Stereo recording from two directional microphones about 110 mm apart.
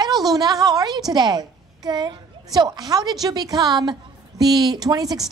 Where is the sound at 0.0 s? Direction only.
35° right (ahead or behind).